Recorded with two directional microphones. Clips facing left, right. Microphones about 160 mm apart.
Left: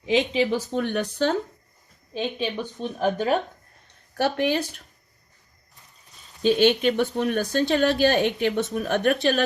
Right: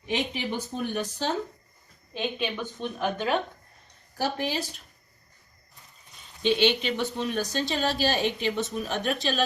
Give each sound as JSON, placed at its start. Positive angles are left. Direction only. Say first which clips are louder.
{"t": 0.0, "sound": "a woman's voice", "louder": "left 8 dB", "side_deg": 90}
{"t": 2.4, "sound": "speech", "louder": "left 3 dB", "side_deg": 35}
{"t": 4.2, "sound": "a woman's voice", "louder": "left 6 dB", "side_deg": 60}
{"t": 6.4, "sound": "a woman's voice", "louder": "left 5 dB", "side_deg": 45}